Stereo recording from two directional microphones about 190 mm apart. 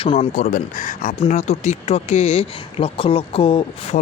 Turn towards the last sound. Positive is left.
turn(degrees=30)  # may be behind; listen again after turning